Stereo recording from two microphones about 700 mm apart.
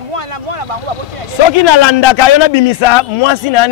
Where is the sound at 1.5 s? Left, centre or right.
Left.